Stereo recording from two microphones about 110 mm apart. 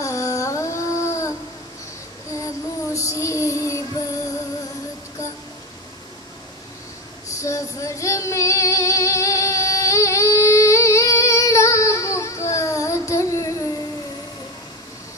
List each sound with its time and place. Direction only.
0.0 s a sound: 30° left (ahead or behind)
2.4 s child singing: 30° left (ahead or behind)
7.3 s female singing: 30° left (ahead or behind)